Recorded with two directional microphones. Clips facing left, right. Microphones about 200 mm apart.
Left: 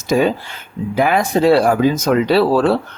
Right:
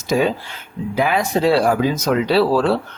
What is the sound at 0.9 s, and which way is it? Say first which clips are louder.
Speech: left 3 dB; 50° left (ahead or behind).